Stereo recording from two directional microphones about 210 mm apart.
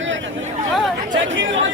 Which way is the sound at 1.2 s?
65° right (ahead or behind).